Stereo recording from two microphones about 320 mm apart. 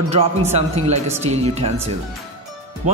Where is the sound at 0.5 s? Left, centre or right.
Centre.